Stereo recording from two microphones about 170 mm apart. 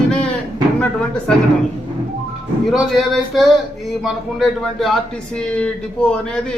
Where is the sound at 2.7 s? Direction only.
Centre (ahead or behind).